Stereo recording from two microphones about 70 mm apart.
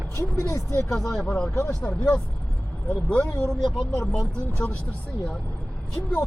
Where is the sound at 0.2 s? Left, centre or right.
Left.